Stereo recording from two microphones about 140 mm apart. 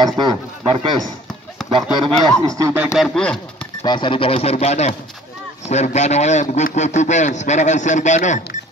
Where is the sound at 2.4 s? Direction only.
25° right (ahead or behind).